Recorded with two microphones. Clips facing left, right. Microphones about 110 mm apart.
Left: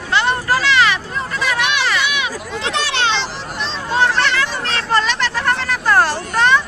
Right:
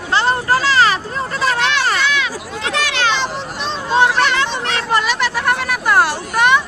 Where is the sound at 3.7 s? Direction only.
15° right (ahead or behind).